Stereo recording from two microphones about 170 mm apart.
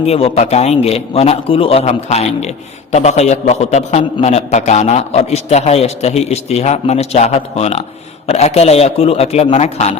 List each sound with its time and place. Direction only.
0.1 s a man's voice: 40° left (ahead or behind)